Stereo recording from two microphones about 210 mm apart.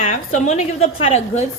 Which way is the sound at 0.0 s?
35° left (ahead or behind).